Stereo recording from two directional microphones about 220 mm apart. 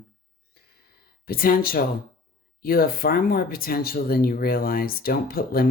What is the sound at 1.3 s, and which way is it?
Speech, 40° left (ahead or behind).